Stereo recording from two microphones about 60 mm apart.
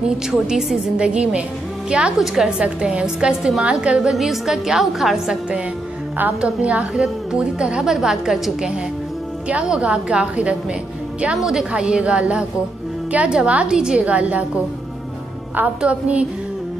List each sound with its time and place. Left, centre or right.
0.3 s a woman's voice: centre
4.1 s a woman's voice: centre
6.4 s a woman's voice: centre
11.3 s a woman's voice: centre
11.7 s a woman's voice: centre
15.8 s a woman's voice: right